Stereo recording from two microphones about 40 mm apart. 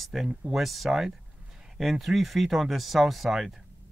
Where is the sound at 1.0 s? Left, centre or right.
Centre.